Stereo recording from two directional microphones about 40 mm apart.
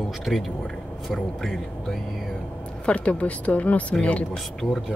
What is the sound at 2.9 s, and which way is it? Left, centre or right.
Speech, left.